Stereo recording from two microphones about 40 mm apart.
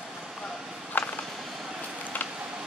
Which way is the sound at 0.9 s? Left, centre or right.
Left.